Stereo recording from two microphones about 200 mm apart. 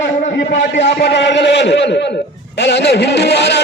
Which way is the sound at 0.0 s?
60° left (ahead or behind).